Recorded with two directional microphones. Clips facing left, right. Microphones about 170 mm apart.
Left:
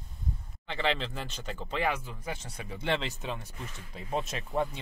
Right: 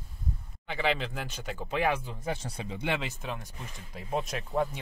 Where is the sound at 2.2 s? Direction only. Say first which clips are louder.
Right 4 dB; 30° right (ahead or behind).